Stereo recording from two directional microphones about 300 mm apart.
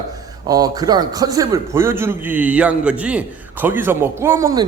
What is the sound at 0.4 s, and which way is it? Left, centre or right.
A man's voice, centre.